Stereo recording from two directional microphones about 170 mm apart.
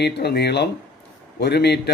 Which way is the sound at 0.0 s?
75° left (ahead or behind).